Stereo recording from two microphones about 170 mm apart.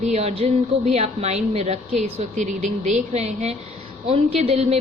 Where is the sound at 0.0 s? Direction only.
40° right (ahead or behind).